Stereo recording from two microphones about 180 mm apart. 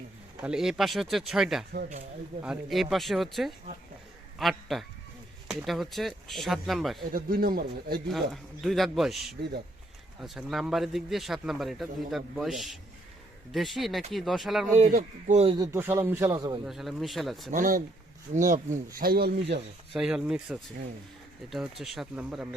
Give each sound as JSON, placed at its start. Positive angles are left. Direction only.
{"t": 0.4, "sound": "a man's voice", "side_deg": -5}
{"t": 7.1, "sound": "speech", "side_deg": -55}
{"t": 8.1, "sound": "a man's voice", "side_deg": 0}
{"t": 14.8, "sound": "a man's voice", "side_deg": -40}
{"t": 15.5, "sound": "speech", "side_deg": -15}
{"t": 16.6, "sound": "a man's voice", "side_deg": 0}
{"t": 17.5, "sound": "speech", "side_deg": -50}
{"t": 18.9, "sound": "speech", "side_deg": -55}
{"t": 19.9, "sound": "a man's voice", "side_deg": -5}